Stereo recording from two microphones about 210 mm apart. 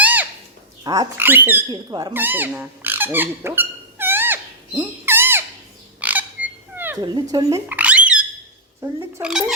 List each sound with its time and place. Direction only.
0.0 s goose: 10° right (ahead or behind)
0.9 s speech: 15° right (ahead or behind)
2.1 s speech: 10° right (ahead or behind)
4.8 s bird: 10° right (ahead or behind)
6.0 s frog: 5° right (ahead or behind)
7.0 s speech: 20° right (ahead or behind)